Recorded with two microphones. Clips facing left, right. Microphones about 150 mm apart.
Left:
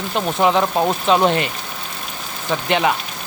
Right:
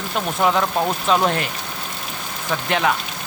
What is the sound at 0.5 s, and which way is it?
Speech, 15° left (ahead or behind).